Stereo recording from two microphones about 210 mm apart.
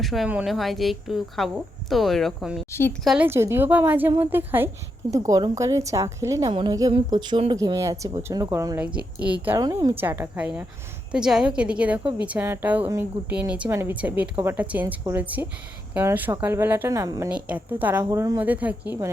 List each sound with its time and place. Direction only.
0.0 s a woman's voice: centre (ahead or behind)